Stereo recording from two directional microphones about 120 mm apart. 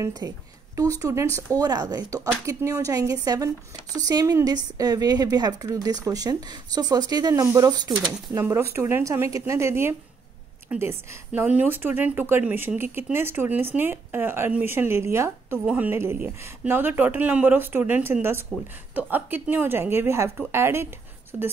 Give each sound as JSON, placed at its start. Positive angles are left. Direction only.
{"t": 0.2, "sound": "a woman's voice", "side_deg": -25}
{"t": 15.6, "sound": "speech", "side_deg": -10}
{"t": 15.9, "sound": "speech", "side_deg": -20}